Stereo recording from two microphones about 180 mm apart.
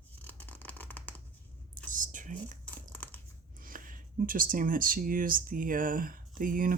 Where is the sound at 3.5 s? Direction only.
50° right (ahead or behind).